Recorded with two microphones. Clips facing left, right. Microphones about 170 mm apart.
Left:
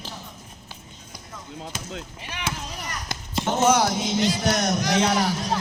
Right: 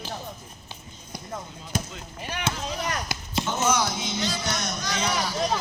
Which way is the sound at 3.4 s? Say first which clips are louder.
Left 6 dB; 35° left (ahead or behind).